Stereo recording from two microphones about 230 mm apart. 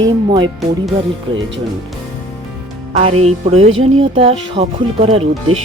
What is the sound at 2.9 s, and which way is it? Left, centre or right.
Speech, right.